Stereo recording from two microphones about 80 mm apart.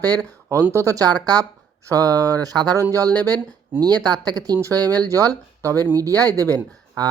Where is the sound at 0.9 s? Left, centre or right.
Right.